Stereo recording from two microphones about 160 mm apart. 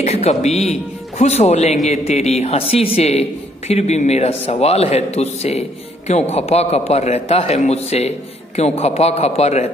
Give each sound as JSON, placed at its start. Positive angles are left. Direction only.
{"t": 0.0, "sound": "a man's voice", "side_deg": 40}